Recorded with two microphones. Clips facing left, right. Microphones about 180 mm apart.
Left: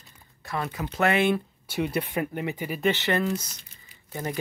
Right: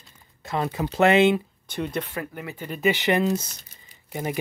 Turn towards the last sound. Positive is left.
turn(degrees=-15)  # may be behind; listen again after turning